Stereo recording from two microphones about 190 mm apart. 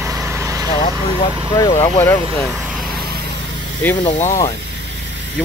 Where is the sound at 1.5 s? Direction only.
15° left (ahead or behind).